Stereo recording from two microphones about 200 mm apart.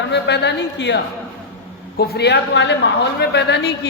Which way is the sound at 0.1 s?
55° left (ahead or behind).